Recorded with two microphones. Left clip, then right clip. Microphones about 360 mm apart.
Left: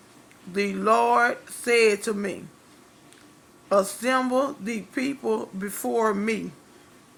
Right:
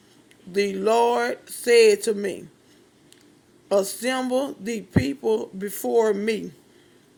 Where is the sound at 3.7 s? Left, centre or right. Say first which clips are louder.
Even; right.